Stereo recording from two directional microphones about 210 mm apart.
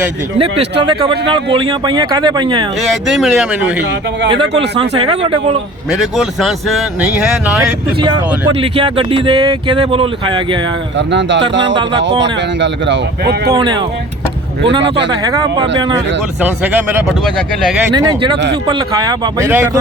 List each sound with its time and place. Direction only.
0.3 s speech: 25° right (ahead or behind)
3.1 s speech: centre (ahead or behind)
4.3 s speech: 25° right (ahead or behind)
5.9 s speech: centre (ahead or behind)
7.6 s speech: 20° right (ahead or behind)
10.9 s speech: 60° right (ahead or behind)
13.5 s speech: 20° right (ahead or behind)
14.8 s speech: 55° right (ahead or behind)
15.2 s speech: 15° right (ahead or behind)
17.9 s speech: 20° right (ahead or behind)